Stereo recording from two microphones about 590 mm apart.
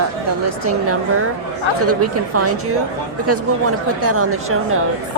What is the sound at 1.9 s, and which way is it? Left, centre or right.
Speech, right.